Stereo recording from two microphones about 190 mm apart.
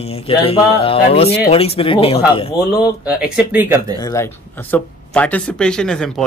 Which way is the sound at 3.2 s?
10° right (ahead or behind).